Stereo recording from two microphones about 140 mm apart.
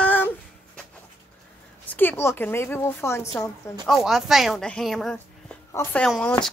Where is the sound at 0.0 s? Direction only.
10° left (ahead or behind).